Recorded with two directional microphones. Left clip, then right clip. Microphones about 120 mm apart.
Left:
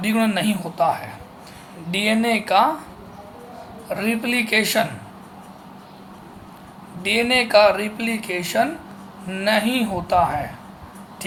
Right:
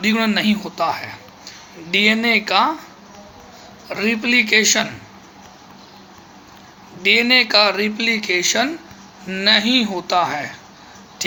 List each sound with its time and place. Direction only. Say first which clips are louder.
0.0 s speech: right 3 dB; 30° right (ahead or behind)
3.8 s speech: right 4 dB; 25° right (ahead or behind)
7.0 s speech: right 5 dB; 25° right (ahead or behind)